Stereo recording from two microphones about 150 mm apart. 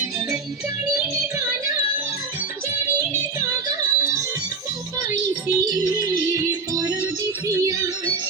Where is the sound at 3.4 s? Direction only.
20° right (ahead or behind).